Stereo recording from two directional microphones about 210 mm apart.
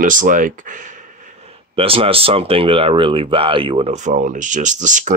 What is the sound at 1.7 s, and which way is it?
Speech, 25° right (ahead or behind).